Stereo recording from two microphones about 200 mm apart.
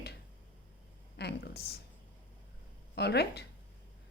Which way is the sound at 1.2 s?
55° left (ahead or behind).